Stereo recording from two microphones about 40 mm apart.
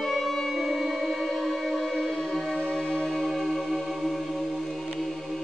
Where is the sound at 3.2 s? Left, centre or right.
Centre.